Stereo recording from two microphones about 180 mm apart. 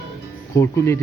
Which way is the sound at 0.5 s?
15° left (ahead or behind).